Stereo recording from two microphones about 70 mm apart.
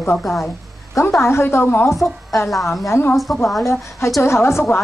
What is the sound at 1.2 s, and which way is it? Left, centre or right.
Speech, left.